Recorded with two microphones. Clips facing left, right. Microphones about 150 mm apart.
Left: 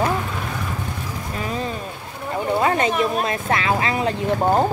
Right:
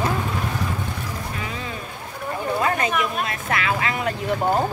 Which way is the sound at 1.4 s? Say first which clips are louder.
Left 6 dB; 40° left (ahead or behind).